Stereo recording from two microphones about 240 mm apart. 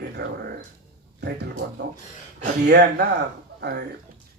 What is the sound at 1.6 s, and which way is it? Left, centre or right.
Speech, right.